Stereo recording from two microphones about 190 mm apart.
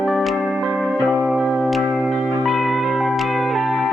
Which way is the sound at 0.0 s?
Centre (ahead or behind).